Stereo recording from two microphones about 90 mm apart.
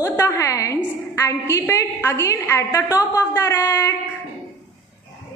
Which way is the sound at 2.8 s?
40° left (ahead or behind).